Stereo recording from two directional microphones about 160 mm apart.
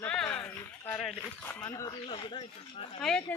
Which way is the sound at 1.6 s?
20° left (ahead or behind).